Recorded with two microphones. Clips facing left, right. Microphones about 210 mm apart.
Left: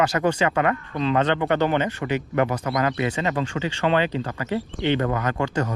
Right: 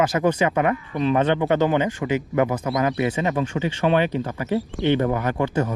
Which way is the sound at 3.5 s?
15° right (ahead or behind).